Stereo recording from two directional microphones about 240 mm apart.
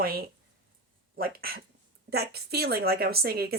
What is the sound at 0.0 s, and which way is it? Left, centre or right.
Speech, right.